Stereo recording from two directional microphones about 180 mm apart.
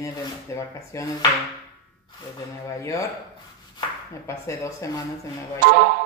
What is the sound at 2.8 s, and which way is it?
Speech, 20° left (ahead or behind).